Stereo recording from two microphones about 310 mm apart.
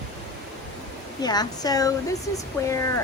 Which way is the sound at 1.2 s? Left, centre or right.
Centre.